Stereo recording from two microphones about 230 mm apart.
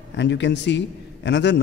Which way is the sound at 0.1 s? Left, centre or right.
Left.